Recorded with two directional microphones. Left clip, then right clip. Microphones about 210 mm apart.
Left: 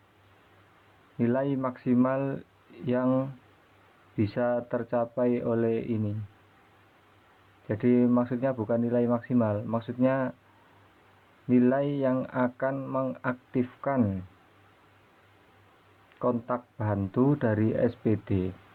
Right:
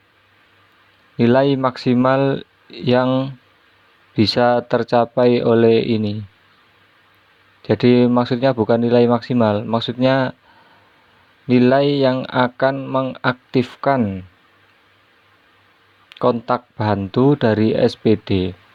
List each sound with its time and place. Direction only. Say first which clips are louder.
1.2 s speech: right 13 dB; 65° right (ahead or behind); by 3.3 s 45° right (ahead or behind)
4.2 s speech: right 13 dB; 60° right (ahead or behind)
7.7 s speech: right 11 dB; 60° right (ahead or behind)
11.4 s speech: right 11 dB; 60° right (ahead or behind)
16.1 s speech: right 11 dB; 55° right (ahead or behind)